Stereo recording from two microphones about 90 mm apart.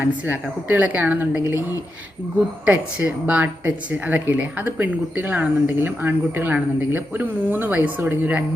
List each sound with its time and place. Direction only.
0.0 s speech: 20° right (ahead or behind)
2.6 s speech: 15° right (ahead or behind)